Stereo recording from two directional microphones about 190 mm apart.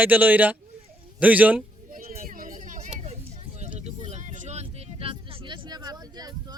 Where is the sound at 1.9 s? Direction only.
45° right (ahead or behind).